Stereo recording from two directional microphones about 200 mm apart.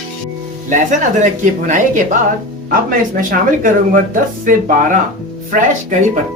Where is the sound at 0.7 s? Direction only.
40° right (ahead or behind).